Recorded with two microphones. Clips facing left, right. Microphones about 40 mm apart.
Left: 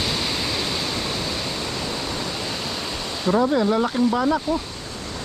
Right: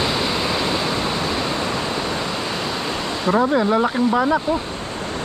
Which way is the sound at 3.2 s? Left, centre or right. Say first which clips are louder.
Right 1 dB; centre.